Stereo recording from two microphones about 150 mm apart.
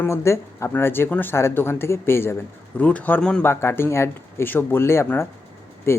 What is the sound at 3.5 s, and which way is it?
Speech, 15° left (ahead or behind).